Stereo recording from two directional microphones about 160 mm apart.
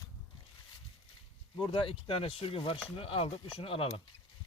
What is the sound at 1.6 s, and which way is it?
Speech, 35° left (ahead or behind).